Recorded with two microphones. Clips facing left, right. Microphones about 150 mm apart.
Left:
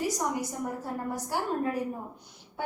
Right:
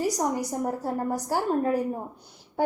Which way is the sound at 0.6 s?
40° right (ahead or behind).